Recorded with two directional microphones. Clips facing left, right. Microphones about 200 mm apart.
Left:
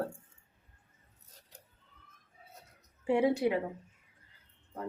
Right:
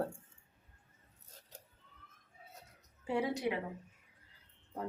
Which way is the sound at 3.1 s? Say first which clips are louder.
Left 7 dB; 25° left (ahead or behind).